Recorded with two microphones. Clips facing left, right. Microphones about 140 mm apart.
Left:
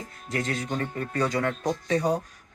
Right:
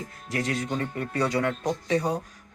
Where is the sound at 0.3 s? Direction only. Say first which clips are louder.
Right 1 dB; 10° right (ahead or behind).